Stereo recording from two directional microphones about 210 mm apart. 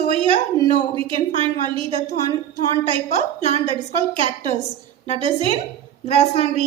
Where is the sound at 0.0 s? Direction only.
25° right (ahead or behind).